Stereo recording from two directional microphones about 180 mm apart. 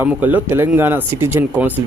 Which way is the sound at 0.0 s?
10° right (ahead or behind).